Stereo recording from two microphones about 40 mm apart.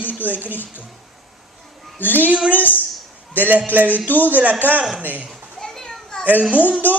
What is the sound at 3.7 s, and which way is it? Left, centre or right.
Speech, right.